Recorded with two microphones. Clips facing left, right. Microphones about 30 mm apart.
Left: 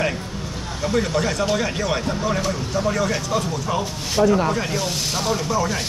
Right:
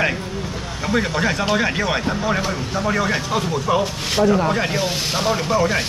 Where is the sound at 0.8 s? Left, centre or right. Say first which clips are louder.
Right 1 dB; right.